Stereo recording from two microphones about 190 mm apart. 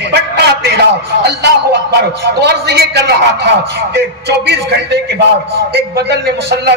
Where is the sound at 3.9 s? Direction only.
60° right (ahead or behind).